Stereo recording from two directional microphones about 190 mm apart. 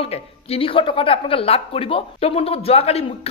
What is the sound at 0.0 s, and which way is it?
A woman's voice, 30° left (ahead or behind).